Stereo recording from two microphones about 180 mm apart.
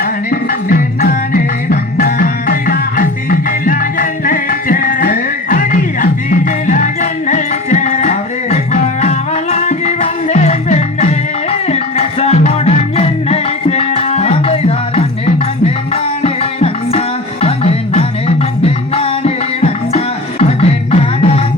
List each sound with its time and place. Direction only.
0.0 s music: 50° left (ahead or behind); by 15.0 s 35° left (ahead or behind)
16.2 s music: 35° left (ahead or behind)